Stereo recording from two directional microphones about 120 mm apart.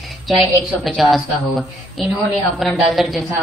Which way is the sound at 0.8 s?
Centre (ahead or behind).